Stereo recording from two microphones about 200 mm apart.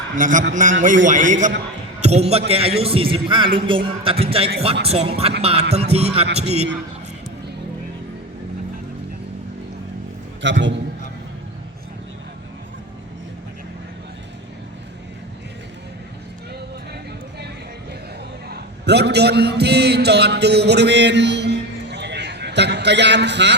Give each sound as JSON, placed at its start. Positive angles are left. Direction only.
{"t": 0.2, "sound": "a man's voice", "side_deg": -40}
{"t": 10.4, "sound": "a man's voice", "side_deg": -65}
{"t": 18.4, "sound": "a man's voice", "side_deg": -55}